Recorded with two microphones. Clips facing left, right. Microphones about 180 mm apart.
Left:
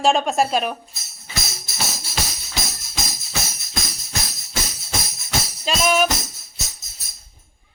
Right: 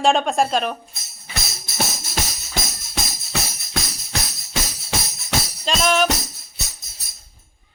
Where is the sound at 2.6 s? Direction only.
50° right (ahead or behind).